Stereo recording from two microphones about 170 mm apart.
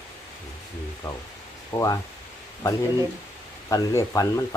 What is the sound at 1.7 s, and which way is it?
Speech, 20° left (ahead or behind).